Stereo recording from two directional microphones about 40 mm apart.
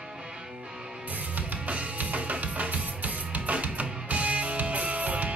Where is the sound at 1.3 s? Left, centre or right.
Right.